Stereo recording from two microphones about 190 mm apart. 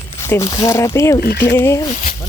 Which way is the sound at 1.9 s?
40° left (ahead or behind).